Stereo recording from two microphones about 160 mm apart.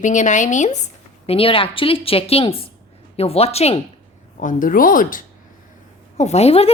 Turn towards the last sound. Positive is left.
turn(degrees=40)  # may be behind; listen again after turning